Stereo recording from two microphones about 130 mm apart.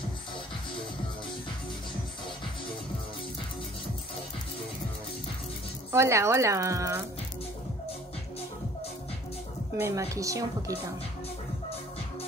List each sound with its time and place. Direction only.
5.9 s speech: 20° right (ahead or behind)
9.8 s speech: 25° right (ahead or behind)